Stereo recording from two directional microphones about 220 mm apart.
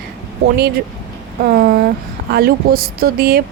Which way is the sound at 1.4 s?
45° right (ahead or behind).